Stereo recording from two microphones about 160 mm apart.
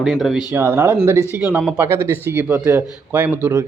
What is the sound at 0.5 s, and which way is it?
Speech, 15° right (ahead or behind).